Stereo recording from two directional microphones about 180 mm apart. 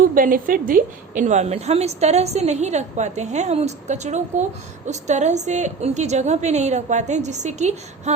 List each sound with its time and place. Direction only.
0.1 s a woman's voice: 50° right (ahead or behind)